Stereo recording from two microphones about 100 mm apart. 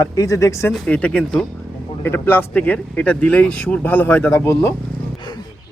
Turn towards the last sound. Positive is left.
turn(degrees=25)  # may be behind; listen again after turning